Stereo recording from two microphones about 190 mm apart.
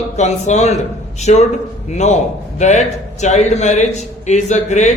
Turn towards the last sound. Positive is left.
turn(degrees=40)  # may be behind; listen again after turning